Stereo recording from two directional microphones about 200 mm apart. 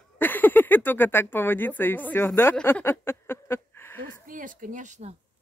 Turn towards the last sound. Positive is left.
turn(degrees=-35)  # may be behind; listen again after turning